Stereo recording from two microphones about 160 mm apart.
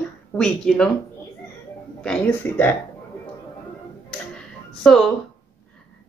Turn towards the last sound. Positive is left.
turn(degrees=5)  # may be behind; listen again after turning